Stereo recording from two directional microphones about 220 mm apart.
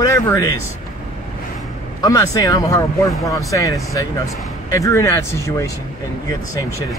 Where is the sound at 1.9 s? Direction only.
15° left (ahead or behind).